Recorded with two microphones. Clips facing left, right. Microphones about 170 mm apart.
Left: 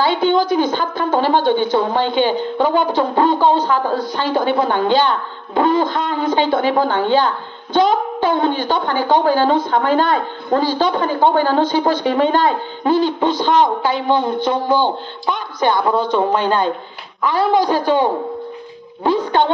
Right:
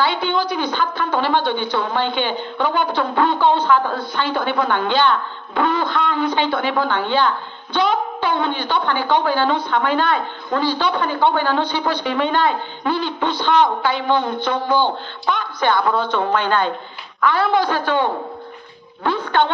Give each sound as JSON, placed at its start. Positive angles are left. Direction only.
{"t": 0.0, "sound": "a woman's voice", "side_deg": 45}
{"t": 17.5, "sound": "a woman's voice", "side_deg": 40}
{"t": 19.0, "sound": "a sound", "side_deg": 20}